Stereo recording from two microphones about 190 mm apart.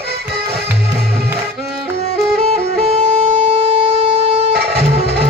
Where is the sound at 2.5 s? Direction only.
35° right (ahead or behind).